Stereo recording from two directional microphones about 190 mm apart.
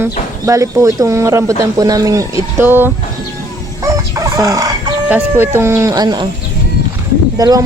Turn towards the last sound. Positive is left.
turn(degrees=-20)  # may be behind; listen again after turning